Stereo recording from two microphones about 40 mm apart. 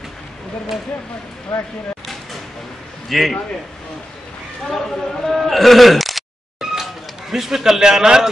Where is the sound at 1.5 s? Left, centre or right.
Left.